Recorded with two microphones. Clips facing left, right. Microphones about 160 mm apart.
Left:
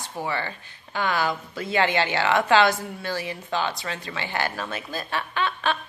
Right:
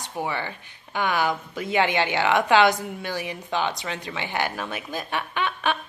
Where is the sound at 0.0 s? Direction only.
15° right (ahead or behind).